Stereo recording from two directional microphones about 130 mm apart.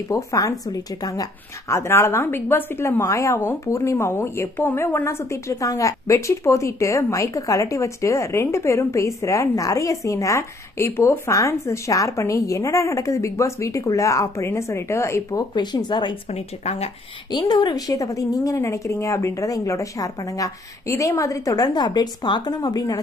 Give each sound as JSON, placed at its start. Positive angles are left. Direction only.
{"t": 0.1, "sound": "a woman's voice", "side_deg": 25}
{"t": 15.5, "sound": "speech", "side_deg": 35}
{"t": 16.3, "sound": "speech", "side_deg": 55}
{"t": 17.3, "sound": "a woman's voice", "side_deg": 30}